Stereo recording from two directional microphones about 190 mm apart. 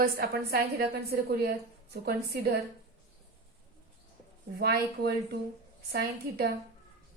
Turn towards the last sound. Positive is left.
turn(degrees=-60)  # may be behind; listen again after turning